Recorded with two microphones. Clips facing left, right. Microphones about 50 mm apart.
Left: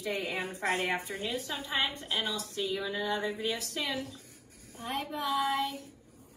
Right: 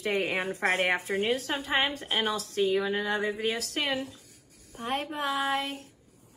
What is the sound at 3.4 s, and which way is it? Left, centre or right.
Speech, right.